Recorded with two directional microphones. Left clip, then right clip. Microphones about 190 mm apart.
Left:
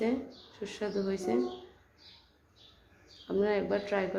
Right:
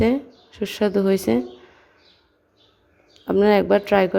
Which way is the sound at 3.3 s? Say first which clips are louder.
Right 13 dB; 50° right (ahead or behind).